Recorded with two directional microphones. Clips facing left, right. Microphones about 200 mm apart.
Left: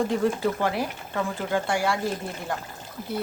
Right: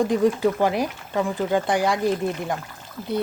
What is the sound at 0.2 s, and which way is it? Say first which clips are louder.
Speech: right 5 dB; 15° right (ahead or behind).